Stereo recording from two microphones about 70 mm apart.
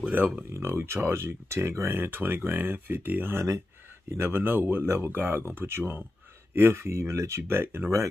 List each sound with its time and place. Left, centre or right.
0.0 s speech: right
0.5 s speech: right
3.3 s speech: right